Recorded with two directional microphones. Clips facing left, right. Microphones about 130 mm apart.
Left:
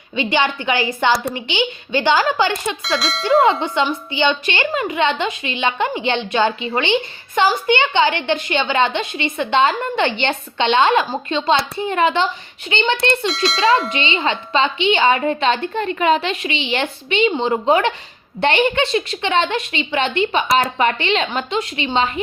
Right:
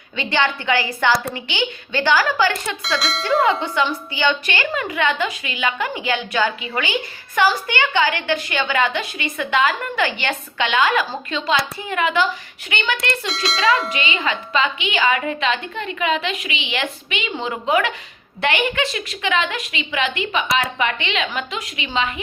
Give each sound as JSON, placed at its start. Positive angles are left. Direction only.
{"t": 0.2, "sound": "a woman's voice", "side_deg": 15}
{"t": 3.0, "sound": "speech", "side_deg": 0}
{"t": 3.4, "sound": "a woman's voice", "side_deg": 20}
{"t": 13.2, "sound": "speech", "side_deg": 0}
{"t": 13.6, "sound": "a woman's voice", "side_deg": 25}